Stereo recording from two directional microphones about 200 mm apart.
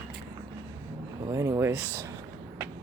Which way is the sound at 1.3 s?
15° right (ahead or behind).